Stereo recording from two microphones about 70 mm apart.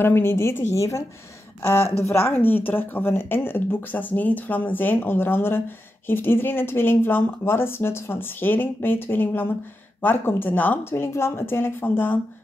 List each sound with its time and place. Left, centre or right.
0.0 s speech: left